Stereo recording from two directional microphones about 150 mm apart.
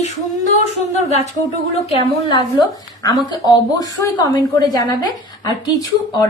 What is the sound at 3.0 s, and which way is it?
A woman's voice, 25° left (ahead or behind).